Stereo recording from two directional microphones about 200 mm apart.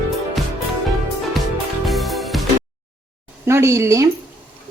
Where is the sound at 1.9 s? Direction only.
Centre (ahead or behind).